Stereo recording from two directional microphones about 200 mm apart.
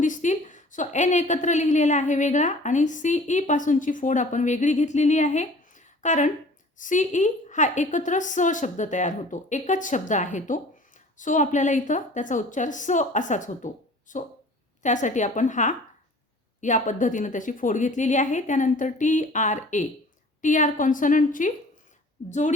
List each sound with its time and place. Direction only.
0.0 s a woman's voice: 40° left (ahead or behind)